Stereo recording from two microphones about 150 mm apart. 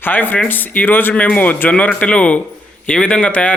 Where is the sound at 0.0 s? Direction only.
10° left (ahead or behind).